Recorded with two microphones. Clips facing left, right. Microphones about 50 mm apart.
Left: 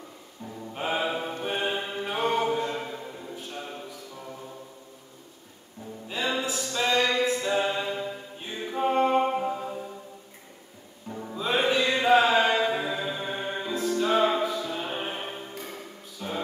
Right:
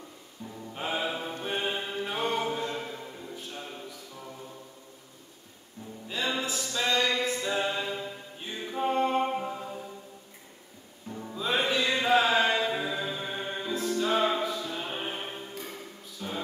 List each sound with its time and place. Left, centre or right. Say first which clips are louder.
0.5 s music: left 3 dB; centre
6.0 s music: left 2 dB; centre
11.1 s music: left 2 dB; centre